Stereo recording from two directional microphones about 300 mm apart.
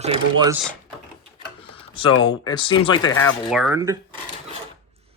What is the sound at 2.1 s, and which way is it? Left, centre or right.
Speech, left.